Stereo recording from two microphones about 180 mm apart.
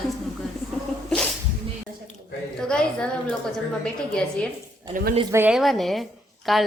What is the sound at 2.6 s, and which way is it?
Speech, 5° left (ahead or behind).